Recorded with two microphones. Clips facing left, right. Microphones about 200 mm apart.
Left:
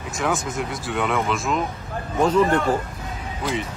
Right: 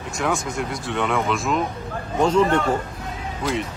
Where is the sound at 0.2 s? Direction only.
Centre (ahead or behind).